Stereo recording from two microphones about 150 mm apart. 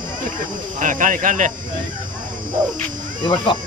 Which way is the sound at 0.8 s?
60° right (ahead or behind).